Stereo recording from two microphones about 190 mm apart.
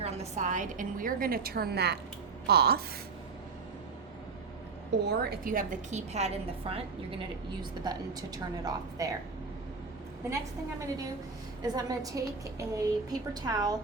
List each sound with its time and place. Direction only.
0.0 s a woman's voice: 35° right (ahead or behind); by 2.8 s 55° right (ahead or behind)
5.0 s a woman's voice: 55° right (ahead or behind); by 6.8 s 30° right (ahead or behind)
7.9 s a woman's voice: 20° right (ahead or behind)
11.6 s a woman's voice: 20° right (ahead or behind)